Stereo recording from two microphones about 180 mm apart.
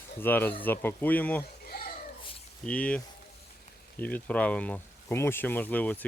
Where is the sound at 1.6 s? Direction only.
60° left (ahead or behind).